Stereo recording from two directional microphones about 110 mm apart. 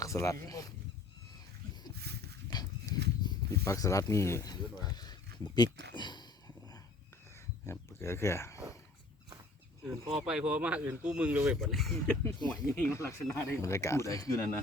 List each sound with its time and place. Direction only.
0.0 s speech: 30° left (ahead or behind)
2.5 s horse: 40° left (ahead or behind)
3.6 s speech: 25° left (ahead or behind)
4.5 s a sound: 40° left (ahead or behind)
7.7 s speech: 25° left (ahead or behind)
10.0 s speech: 55° right (ahead or behind)
10.2 s speech: 10° right (ahead or behind)
11.6 s speech: centre (ahead or behind)
12.5 s speech: 10° left (ahead or behind)
12.9 s speech: 25° left (ahead or behind)